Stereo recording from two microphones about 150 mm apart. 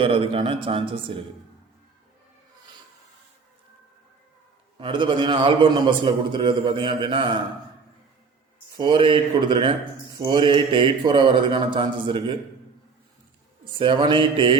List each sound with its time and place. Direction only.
0.0 s a man's voice: 35° right (ahead or behind)
4.8 s a man's voice: 30° right (ahead or behind)
8.7 s a man's voice: 30° right (ahead or behind)
13.7 s a man's voice: 35° right (ahead or behind)